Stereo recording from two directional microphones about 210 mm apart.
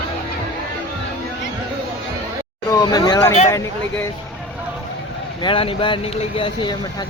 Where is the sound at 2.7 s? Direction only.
20° left (ahead or behind).